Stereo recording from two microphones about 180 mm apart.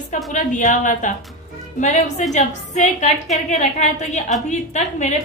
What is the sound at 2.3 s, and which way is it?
A woman's voice, 40° left (ahead or behind).